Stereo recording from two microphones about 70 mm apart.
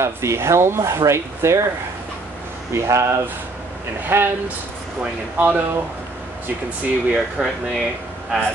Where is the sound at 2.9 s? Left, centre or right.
Right.